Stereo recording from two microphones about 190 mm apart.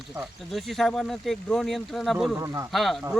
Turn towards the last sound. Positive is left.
turn(degrees=0)  # may be behind; listen again after turning